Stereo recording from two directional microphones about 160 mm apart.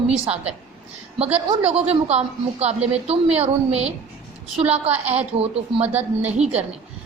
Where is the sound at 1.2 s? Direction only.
40° right (ahead or behind).